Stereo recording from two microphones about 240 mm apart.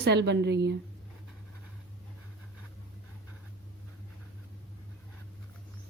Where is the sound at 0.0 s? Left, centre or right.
Right.